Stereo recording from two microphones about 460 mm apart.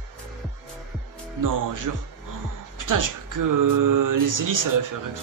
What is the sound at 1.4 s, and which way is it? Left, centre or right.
Speech, right.